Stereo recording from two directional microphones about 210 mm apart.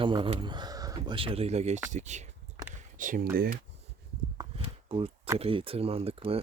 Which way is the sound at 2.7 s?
40° right (ahead or behind).